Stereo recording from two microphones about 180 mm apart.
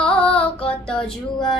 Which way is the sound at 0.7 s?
5° left (ahead or behind).